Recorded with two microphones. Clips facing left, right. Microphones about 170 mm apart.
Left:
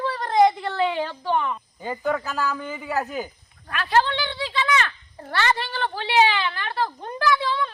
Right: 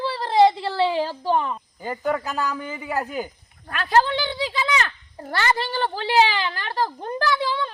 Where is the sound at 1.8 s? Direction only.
5° right (ahead or behind).